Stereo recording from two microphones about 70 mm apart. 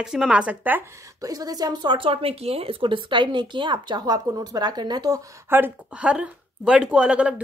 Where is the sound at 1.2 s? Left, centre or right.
Right.